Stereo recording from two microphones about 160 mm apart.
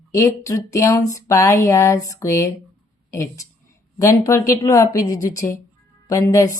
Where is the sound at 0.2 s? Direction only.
20° left (ahead or behind).